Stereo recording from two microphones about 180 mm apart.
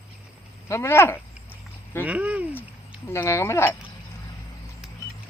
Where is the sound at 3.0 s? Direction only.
15° left (ahead or behind).